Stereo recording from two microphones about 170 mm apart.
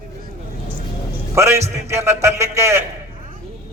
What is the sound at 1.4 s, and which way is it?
A man's voice, 15° right (ahead or behind).